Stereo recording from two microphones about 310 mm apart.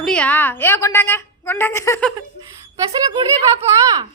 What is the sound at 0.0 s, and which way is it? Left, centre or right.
A woman's voice, centre.